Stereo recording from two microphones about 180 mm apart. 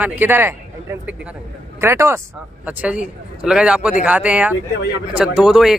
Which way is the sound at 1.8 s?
15° right (ahead or behind).